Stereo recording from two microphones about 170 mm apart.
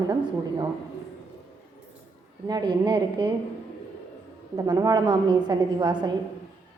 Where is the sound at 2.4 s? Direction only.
25° right (ahead or behind).